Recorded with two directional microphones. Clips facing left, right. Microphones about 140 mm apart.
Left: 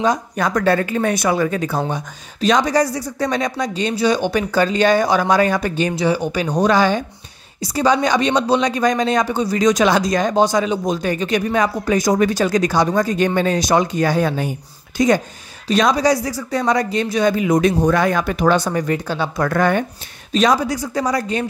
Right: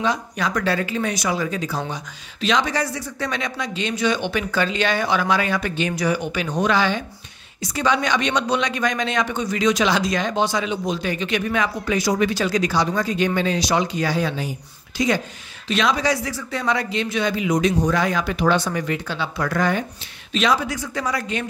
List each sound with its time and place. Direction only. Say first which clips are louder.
0.0 s speech: left 5 dB; 45° left (ahead or behind)
2.4 s speech: left 6 dB; 40° left (ahead or behind)
20.3 s speech: left 5 dB; 40° left (ahead or behind)